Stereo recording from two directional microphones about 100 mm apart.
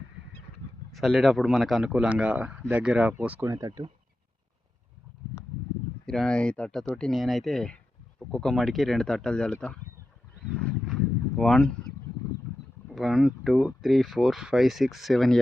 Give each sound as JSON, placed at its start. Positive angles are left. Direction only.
{"t": 0.9, "sound": "speech", "side_deg": 0}
{"t": 3.4, "sound": "speech", "side_deg": -30}
{"t": 6.1, "sound": "speech", "side_deg": 5}
{"t": 10.5, "sound": "wild animals", "side_deg": 15}
{"t": 10.8, "sound": "a sound", "side_deg": 5}
{"t": 12.9, "sound": "speech", "side_deg": 0}